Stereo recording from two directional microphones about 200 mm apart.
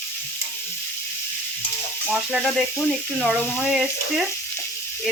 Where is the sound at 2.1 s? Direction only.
Centre (ahead or behind).